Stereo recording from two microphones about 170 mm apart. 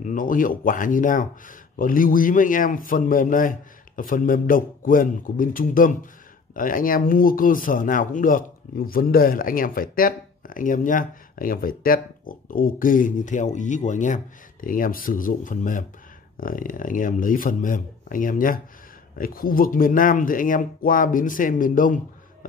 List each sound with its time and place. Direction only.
0.0 s speech: 50° left (ahead or behind)